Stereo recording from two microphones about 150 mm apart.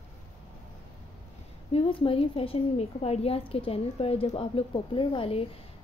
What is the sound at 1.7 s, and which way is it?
A woman's voice, 40° left (ahead or behind).